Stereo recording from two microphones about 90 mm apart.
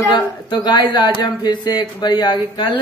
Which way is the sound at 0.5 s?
55° left (ahead or behind).